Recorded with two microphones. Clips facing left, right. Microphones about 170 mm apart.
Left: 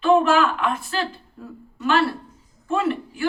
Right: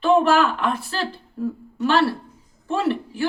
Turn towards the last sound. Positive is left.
turn(degrees=-30)  # may be behind; listen again after turning